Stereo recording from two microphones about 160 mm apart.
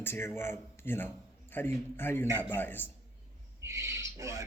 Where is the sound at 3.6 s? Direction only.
20° right (ahead or behind).